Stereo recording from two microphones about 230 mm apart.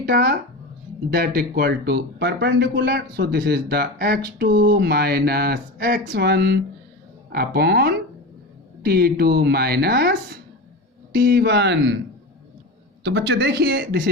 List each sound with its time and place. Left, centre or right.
0.0 s speech: right
13.0 s speech: right